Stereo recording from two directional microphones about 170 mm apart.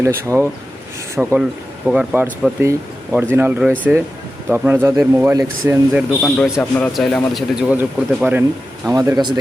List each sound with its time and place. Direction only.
0.0 s a man's voice: 15° right (ahead or behind)
5.9 s a man's voice: centre (ahead or behind)
7.5 s speech: 5° right (ahead or behind)
8.9 s speech: 20° right (ahead or behind)